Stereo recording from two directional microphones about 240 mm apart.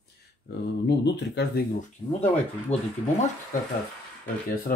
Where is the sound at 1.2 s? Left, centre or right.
Left.